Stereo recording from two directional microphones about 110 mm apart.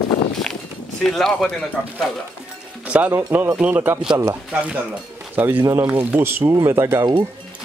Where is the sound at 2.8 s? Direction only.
15° right (ahead or behind).